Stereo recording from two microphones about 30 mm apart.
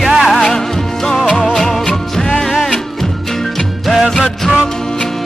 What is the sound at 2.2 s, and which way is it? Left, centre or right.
Music, centre.